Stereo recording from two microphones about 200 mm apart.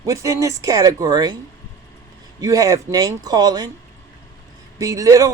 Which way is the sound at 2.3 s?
20° right (ahead or behind).